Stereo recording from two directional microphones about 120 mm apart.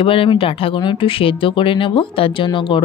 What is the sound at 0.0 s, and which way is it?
Speech, 50° left (ahead or behind).